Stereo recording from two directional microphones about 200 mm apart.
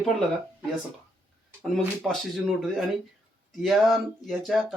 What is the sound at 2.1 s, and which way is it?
Speech, centre (ahead or behind).